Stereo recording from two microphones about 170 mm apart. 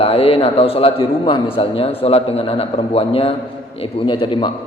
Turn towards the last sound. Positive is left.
turn(degrees=30)  # may be behind; listen again after turning